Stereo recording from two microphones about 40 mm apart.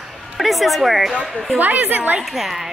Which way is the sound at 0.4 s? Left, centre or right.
Centre.